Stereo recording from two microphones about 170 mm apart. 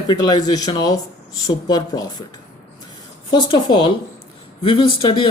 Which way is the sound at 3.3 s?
30° left (ahead or behind).